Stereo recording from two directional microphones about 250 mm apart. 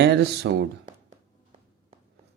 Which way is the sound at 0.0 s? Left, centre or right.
Right.